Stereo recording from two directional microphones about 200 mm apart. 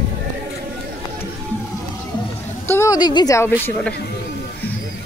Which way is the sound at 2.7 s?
15° left (ahead or behind).